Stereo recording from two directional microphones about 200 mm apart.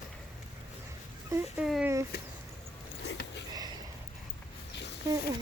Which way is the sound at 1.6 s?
Centre (ahead or behind).